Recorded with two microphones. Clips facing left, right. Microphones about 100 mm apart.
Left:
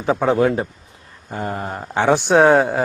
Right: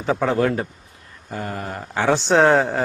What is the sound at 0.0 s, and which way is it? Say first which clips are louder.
Speech: left 3 dB; 15° left (ahead or behind).